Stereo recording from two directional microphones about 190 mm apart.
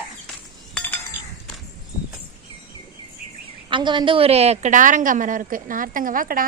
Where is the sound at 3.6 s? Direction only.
25° right (ahead or behind).